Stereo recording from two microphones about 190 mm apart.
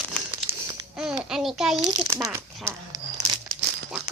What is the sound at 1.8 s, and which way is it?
Speech, 15° right (ahead or behind).